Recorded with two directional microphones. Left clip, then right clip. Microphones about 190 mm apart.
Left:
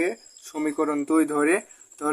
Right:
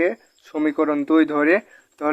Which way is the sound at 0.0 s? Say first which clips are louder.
Right 5 dB; 30° right (ahead or behind).